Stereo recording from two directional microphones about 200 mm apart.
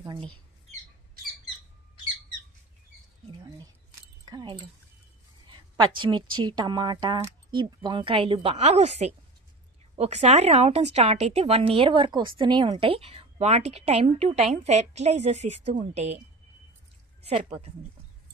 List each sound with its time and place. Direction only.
0.0 s a woman's voice: 25° right (ahead or behind)
4.3 s a woman's voice: 20° right (ahead or behind)
17.3 s speech: 35° right (ahead or behind)